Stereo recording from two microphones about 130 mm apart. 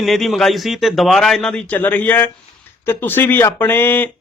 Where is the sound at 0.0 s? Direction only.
Centre (ahead or behind).